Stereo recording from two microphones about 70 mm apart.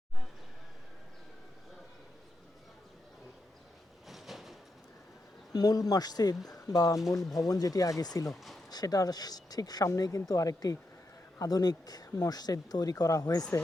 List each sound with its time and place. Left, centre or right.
4.1 s a sound: centre
5.5 s speech: left
8.3 s speech: centre
8.7 s speech: left